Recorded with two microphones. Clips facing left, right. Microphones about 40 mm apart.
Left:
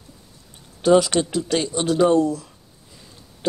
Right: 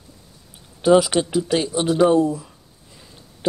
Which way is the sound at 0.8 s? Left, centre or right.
Centre.